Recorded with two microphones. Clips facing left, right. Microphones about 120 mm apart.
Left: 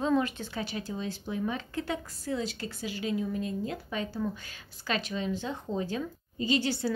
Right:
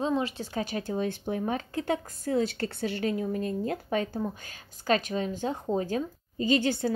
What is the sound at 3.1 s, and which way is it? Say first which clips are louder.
A woman's voice: right 2 dB; 45° right (ahead or behind).